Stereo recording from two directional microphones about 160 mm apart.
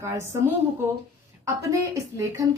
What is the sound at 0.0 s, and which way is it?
Speech, 15° right (ahead or behind).